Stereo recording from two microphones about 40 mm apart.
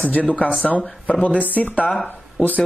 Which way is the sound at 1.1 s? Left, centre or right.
Left.